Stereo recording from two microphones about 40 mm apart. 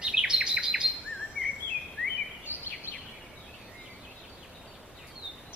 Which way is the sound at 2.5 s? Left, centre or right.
Right.